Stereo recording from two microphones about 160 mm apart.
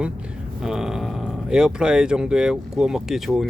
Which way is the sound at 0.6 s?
5° right (ahead or behind).